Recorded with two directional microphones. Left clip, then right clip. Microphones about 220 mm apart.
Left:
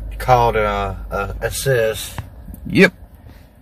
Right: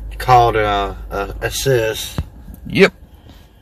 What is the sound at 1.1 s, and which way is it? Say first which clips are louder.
Speech: even; 45° right (ahead or behind).